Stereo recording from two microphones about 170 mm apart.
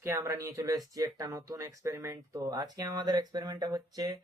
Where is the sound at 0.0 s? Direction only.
15° right (ahead or behind).